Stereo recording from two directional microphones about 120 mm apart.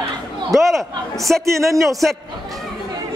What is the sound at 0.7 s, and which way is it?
Speech, centre (ahead or behind).